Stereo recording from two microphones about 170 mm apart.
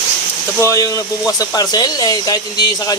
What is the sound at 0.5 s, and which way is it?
Speech, 20° left (ahead or behind).